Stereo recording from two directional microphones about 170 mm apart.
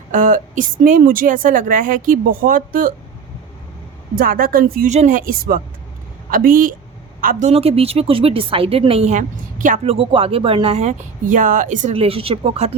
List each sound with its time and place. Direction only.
0.1 s a woman's voice: 50° right (ahead or behind)
4.1 s speech: 60° right (ahead or behind)
4.9 s a woman's voice: 45° right (ahead or behind)
11.9 s a woman's voice: 35° right (ahead or behind)